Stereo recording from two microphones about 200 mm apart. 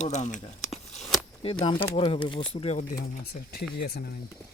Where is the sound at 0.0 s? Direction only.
40° left (ahead or behind).